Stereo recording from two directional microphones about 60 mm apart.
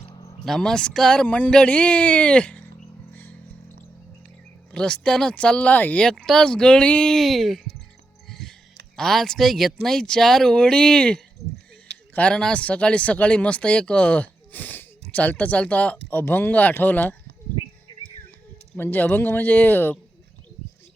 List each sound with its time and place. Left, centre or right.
0.4 s speech: centre
4.7 s speech: centre
6.1 s speech: centre
7.0 s speech: centre
8.3 s music: centre
9.0 s speech: centre; by 17.2 s left
18.9 s speech: left